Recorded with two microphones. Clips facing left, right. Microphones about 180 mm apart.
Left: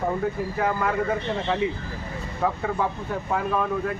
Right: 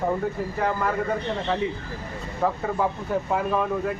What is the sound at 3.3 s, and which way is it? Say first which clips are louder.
Speech: left 1 dB; 5° right (ahead or behind).